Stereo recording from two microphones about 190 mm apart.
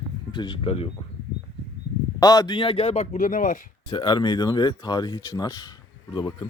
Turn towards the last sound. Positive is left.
turn(degrees=25)  # may be behind; listen again after turning